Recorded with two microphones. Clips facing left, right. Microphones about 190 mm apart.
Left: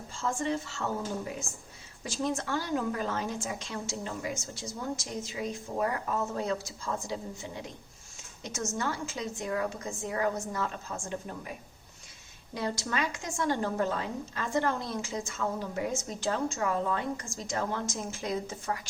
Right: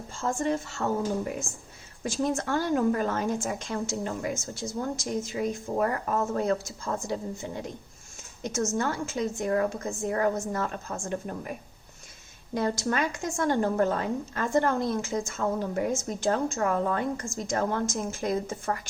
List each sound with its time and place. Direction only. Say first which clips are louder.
0.2 s a woman's voice: right 3 dB; 45° right (ahead or behind)
12.5 s a woman's voice: right 5 dB; 50° right (ahead or behind)